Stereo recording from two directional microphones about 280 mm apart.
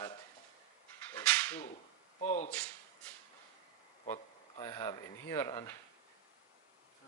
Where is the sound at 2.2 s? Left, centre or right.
Left.